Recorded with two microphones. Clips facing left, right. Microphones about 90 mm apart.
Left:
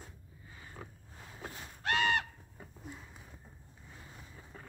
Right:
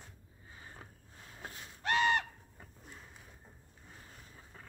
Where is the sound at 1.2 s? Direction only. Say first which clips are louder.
Left 2 dB; 30° left (ahead or behind).